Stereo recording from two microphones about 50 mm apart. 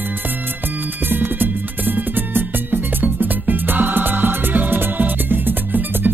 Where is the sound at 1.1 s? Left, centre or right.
Right.